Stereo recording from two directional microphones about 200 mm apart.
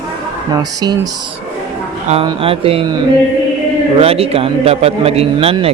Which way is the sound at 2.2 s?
30° right (ahead or behind).